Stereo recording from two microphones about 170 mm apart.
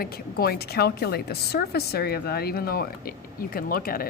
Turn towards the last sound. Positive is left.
turn(degrees=60)  # may be behind; listen again after turning